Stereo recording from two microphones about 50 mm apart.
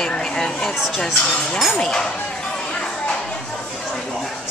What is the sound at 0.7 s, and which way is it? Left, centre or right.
Speech, centre.